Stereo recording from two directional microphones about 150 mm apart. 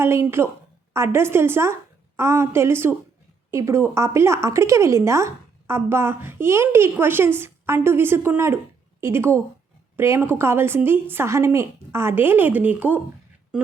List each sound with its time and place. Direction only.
0.0 s a woman's voice: 15° right (ahead or behind)